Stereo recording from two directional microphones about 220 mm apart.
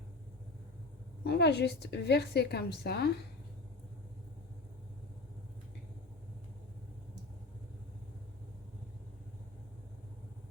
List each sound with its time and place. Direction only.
1.2 s a woman's voice: 50° left (ahead or behind)